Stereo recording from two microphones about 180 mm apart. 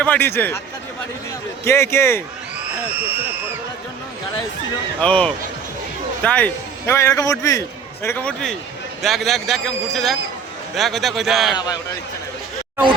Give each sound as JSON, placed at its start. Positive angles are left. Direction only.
{"t": 0.0, "sound": "a man's voice", "side_deg": 10}
{"t": 1.6, "sound": "a man's voice", "side_deg": 15}
{"t": 2.9, "sound": "speech", "side_deg": -10}
{"t": 4.9, "sound": "a man's voice", "side_deg": 5}
{"t": 11.5, "sound": "speech", "side_deg": 20}